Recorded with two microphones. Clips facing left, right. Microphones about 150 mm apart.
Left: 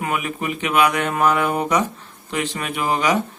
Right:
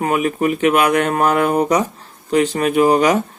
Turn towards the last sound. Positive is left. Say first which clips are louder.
# right 7 dB
turn(degrees=-45)  # may be behind; listen again after turning